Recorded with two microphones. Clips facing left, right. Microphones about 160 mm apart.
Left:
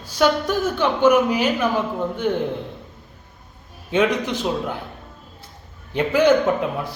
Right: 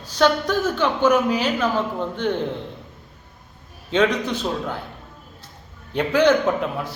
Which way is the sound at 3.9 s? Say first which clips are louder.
Even; 10° left (ahead or behind).